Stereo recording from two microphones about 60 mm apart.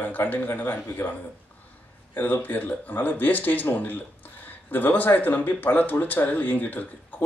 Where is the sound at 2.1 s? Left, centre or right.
Left.